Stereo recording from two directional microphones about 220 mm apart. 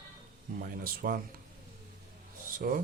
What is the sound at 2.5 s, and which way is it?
Speech, 40° right (ahead or behind).